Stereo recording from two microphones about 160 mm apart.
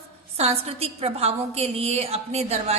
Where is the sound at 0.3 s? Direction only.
40° right (ahead or behind).